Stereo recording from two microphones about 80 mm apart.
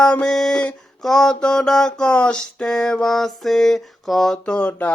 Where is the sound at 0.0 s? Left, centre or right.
Centre.